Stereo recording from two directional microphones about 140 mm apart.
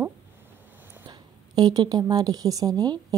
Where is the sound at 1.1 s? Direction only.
30° right (ahead or behind).